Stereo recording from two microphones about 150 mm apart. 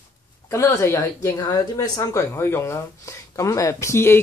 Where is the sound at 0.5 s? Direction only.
20° left (ahead or behind).